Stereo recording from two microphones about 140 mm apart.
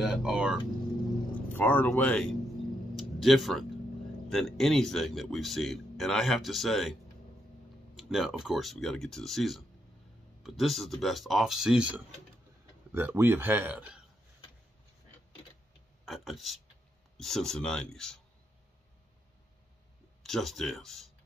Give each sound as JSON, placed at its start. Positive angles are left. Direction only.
{"t": 0.0, "sound": "speech", "side_deg": -5}
{"t": 1.3, "sound": "speech", "side_deg": 15}
{"t": 3.0, "sound": "a sound", "side_deg": 0}
{"t": 4.3, "sound": "speech", "side_deg": 0}
{"t": 12.9, "sound": "speech", "side_deg": -15}
{"t": 16.1, "sound": "speech", "side_deg": 0}
{"t": 20.2, "sound": "speech", "side_deg": 0}